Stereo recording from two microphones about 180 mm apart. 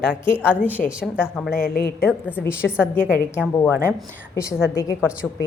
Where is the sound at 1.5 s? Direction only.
60° left (ahead or behind).